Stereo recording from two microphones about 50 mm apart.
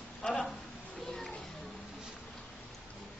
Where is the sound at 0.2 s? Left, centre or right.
Centre.